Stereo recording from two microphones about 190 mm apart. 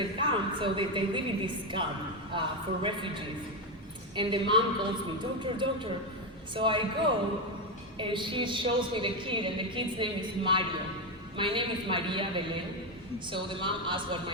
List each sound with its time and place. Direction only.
0.0 s a woman's voice: 25° right (ahead or behind)
4.1 s a woman's voice: 25° right (ahead or behind)
7.9 s a woman's voice: 25° right (ahead or behind)